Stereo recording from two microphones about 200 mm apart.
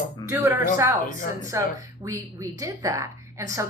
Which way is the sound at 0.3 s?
15° right (ahead or behind).